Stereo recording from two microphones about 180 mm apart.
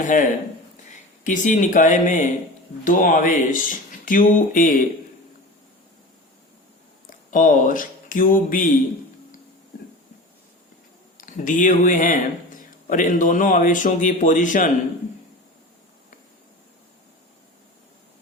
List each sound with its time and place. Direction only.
0.0 s a man's voice: 45° left (ahead or behind)
7.1 s speech: 45° left (ahead or behind)
11.2 s a man's voice: 45° left (ahead or behind)